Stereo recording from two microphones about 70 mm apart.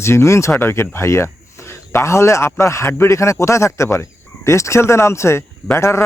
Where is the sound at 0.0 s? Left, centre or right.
Left.